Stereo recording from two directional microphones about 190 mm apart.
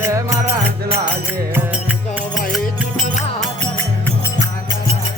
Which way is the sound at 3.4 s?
10° left (ahead or behind).